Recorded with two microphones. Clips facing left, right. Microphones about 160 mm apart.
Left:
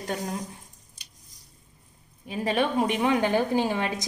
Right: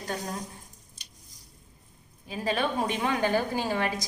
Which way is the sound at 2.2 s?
20° left (ahead or behind).